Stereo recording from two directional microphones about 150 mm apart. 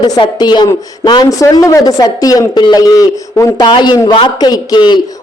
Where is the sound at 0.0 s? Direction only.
30° left (ahead or behind).